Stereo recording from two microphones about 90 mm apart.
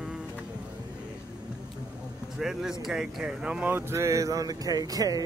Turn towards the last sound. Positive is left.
turn(degrees=-45)  # may be behind; listen again after turning